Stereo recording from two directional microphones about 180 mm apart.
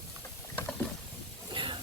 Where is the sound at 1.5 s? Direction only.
25° right (ahead or behind).